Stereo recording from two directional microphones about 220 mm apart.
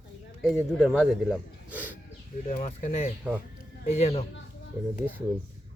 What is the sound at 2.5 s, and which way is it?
Speech, 35° left (ahead or behind).